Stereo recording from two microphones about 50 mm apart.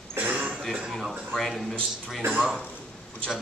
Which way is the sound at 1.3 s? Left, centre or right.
Centre.